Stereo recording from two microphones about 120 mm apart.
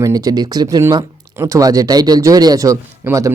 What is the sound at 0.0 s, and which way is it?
Speech, 30° right (ahead or behind).